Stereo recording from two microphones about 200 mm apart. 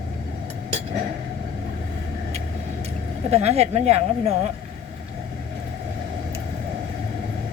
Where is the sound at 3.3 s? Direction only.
30° right (ahead or behind).